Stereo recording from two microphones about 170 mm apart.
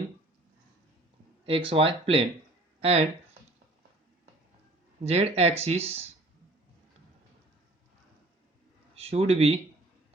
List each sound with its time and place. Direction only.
1.5 s speech: 30° right (ahead or behind)
5.0 s speech: 35° right (ahead or behind)
9.0 s speech: 35° right (ahead or behind)